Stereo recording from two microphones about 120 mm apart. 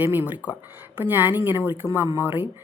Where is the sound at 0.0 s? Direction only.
15° right (ahead or behind).